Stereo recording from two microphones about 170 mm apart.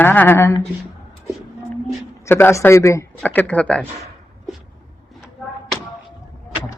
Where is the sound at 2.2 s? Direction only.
15° left (ahead or behind).